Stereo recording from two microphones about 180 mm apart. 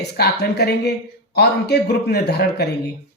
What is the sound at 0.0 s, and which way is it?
Speech, 65° left (ahead or behind).